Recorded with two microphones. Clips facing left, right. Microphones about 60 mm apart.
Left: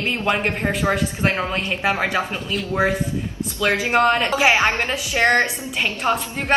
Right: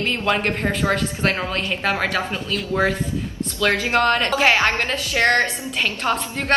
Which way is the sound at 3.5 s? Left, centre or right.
Centre.